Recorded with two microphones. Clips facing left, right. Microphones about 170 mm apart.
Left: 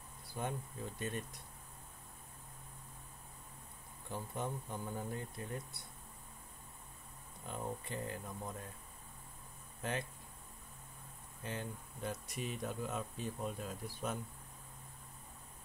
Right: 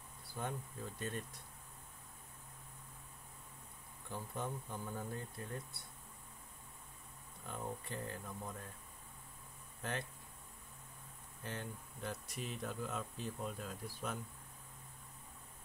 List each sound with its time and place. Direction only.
0.4 s speech: 20° left (ahead or behind)
4.1 s speech: 15° left (ahead or behind)
7.4 s speech: 20° left (ahead or behind)
9.8 s speech: 20° left (ahead or behind)
11.4 s speech: 20° left (ahead or behind)